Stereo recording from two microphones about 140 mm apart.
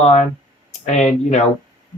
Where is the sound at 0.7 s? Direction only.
55° left (ahead or behind).